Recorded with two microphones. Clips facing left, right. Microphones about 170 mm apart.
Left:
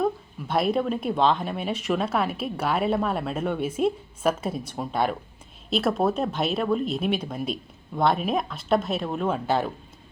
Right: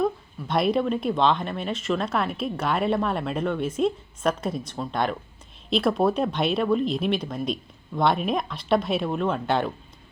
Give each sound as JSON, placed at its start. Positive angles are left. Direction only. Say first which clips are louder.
{"t": 0.0, "sound": "speech", "louder": "even", "side_deg": 5}